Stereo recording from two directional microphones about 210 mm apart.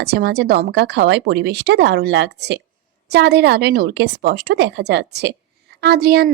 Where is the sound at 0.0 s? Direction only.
50° right (ahead or behind).